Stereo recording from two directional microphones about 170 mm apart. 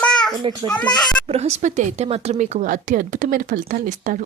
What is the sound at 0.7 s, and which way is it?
Speech, 25° left (ahead or behind).